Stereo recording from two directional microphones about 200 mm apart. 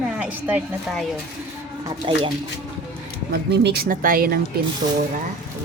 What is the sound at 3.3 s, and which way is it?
Speech, 55° right (ahead or behind).